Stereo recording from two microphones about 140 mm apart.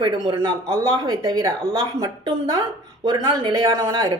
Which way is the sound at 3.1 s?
25° right (ahead or behind).